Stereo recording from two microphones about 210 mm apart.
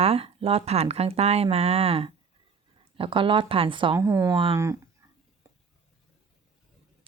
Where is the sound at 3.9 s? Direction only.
10° right (ahead or behind).